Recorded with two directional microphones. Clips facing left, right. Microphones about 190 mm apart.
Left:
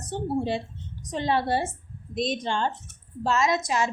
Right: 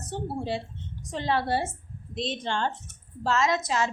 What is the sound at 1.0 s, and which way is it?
A woman's voice, 15° left (ahead or behind).